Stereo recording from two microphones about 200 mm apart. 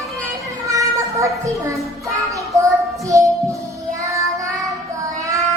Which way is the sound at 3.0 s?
15° right (ahead or behind).